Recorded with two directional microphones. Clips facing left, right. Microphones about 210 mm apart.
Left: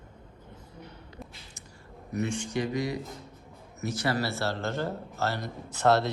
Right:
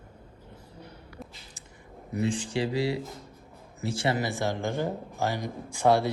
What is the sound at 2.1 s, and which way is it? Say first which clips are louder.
Speech: right 2 dB; 30° right (ahead or behind).